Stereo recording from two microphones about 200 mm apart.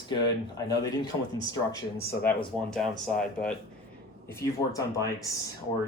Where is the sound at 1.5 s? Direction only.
15° left (ahead or behind).